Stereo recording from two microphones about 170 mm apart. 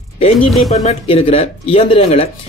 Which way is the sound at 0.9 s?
35° left (ahead or behind).